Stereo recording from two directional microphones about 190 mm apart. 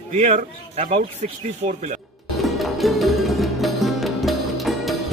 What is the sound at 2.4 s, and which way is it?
Music, centre (ahead or behind).